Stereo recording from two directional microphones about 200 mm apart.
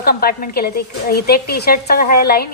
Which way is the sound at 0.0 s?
50° left (ahead or behind).